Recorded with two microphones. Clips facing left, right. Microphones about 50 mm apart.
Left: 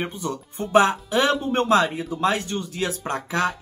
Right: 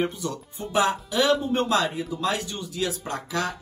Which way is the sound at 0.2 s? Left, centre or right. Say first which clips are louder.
Left 2 dB; left.